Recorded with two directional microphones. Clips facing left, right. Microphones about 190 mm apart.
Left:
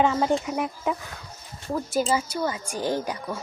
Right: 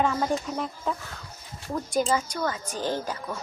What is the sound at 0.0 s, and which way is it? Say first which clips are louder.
Speech: left 3 dB; 25° left (ahead or behind).